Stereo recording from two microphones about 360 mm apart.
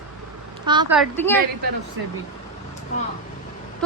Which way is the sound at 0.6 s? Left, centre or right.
Centre.